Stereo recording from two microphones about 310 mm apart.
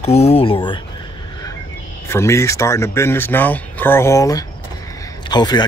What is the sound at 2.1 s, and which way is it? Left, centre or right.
A man's voice, centre.